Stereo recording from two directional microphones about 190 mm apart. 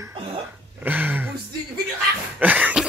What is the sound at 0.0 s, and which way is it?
Cough, 25° right (ahead or behind).